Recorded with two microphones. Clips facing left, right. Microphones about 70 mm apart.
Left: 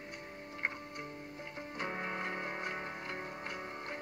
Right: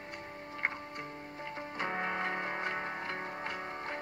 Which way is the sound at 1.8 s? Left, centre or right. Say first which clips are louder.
Right 4 dB; right.